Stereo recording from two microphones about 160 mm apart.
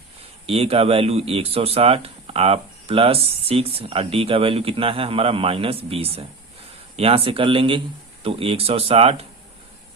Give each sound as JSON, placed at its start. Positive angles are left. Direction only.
{"t": 0.4, "sound": "speech", "side_deg": -40}